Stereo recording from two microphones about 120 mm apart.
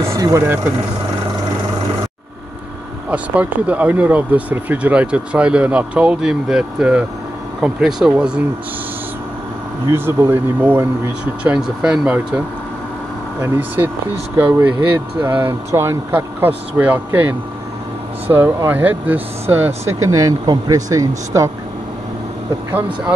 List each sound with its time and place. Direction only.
0.2 s speech: 25° right (ahead or behind)
3.1 s speech: 10° right (ahead or behind)
9.8 s speech: 20° right (ahead or behind)
14.3 s speech: 15° right (ahead or behind)